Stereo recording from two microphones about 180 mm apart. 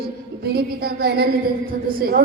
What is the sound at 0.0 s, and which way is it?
Music, 60° right (ahead or behind).